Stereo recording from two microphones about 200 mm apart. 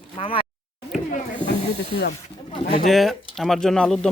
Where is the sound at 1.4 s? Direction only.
55° left (ahead or behind).